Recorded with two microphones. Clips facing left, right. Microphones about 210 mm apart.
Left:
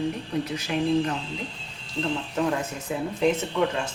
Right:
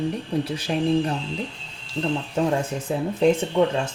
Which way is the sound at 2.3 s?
30° right (ahead or behind).